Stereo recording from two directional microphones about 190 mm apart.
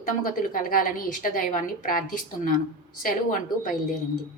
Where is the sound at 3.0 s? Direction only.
45° left (ahead or behind).